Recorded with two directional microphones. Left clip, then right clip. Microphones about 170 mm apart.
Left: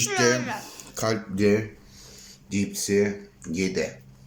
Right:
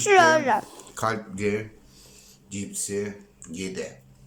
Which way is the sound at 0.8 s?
10° left (ahead or behind).